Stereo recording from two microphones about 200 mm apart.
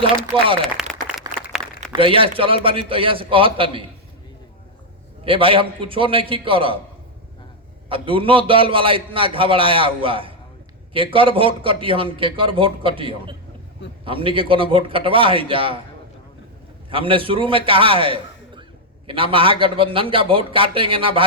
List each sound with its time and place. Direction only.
0.3 s a man's voice: 25° right (ahead or behind)
0.8 s a sound: centre (ahead or behind)
1.9 s a man's voice: 25° right (ahead or behind)
5.2 s a man's voice: 25° right (ahead or behind)
7.9 s a man's voice: 25° right (ahead or behind)
16.9 s a man's voice: 25° right (ahead or behind)